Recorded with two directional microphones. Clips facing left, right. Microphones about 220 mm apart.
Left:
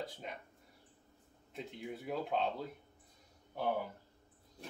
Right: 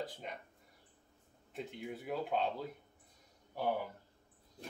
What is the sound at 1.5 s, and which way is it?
Speech, centre (ahead or behind).